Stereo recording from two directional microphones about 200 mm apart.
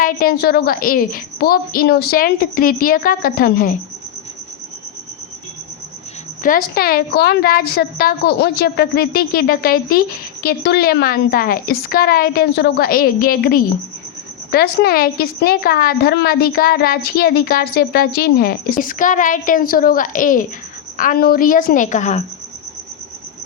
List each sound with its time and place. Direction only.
0.0 s a woman's voice: 50° left (ahead or behind)
6.4 s a woman's voice: 45° left (ahead or behind)